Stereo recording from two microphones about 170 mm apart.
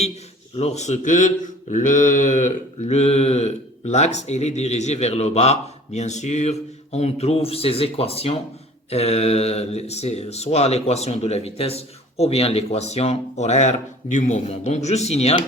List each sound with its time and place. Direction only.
0.5 s speech: 40° left (ahead or behind)